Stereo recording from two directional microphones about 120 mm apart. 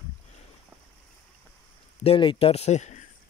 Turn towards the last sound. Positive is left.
turn(degrees=75)  # may be behind; listen again after turning